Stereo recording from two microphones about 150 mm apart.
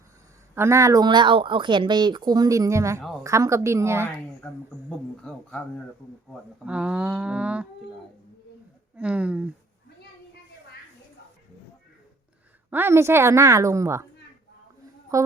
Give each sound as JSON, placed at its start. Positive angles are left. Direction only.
{"t": 0.5, "sound": "speech", "side_deg": -15}
{"t": 4.9, "sound": "speech", "side_deg": 5}
{"t": 6.7, "sound": "a sound", "side_deg": -5}
{"t": 9.0, "sound": "a sound", "side_deg": -10}
{"t": 12.7, "sound": "speech", "side_deg": -15}
{"t": 15.1, "sound": "a woman's voice", "side_deg": -20}